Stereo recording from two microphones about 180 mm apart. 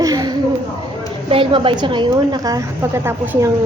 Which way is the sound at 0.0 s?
20° right (ahead or behind).